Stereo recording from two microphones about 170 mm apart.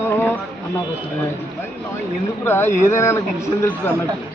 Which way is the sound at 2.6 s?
45° left (ahead or behind).